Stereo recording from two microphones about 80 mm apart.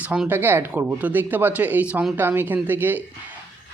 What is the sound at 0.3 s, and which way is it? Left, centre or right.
Speech, right.